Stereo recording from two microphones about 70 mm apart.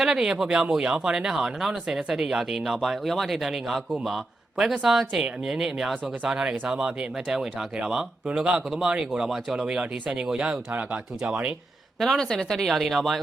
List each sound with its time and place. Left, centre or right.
0.0 s speech: centre; by 11.0 s right
11.9 s speech: centre